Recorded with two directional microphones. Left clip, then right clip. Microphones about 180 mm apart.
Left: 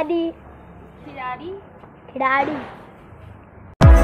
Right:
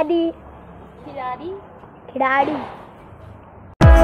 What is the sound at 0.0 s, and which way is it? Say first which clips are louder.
Speech: right 3 dB; 20° right (ahead or behind).